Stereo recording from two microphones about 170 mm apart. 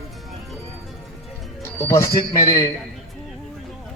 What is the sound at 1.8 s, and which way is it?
Speech, 20° left (ahead or behind).